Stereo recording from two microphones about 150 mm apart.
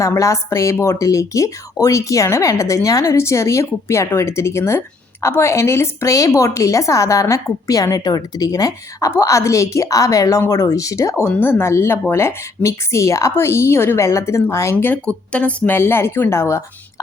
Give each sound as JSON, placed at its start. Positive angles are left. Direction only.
{"t": 0.0, "sound": "a woman's voice", "side_deg": 20}